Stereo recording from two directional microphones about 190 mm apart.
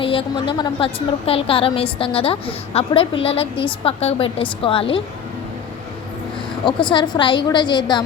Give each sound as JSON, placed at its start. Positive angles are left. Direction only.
{"t": 0.0, "sound": "a woman's voice", "side_deg": 30}
{"t": 6.7, "sound": "a woman's voice", "side_deg": 25}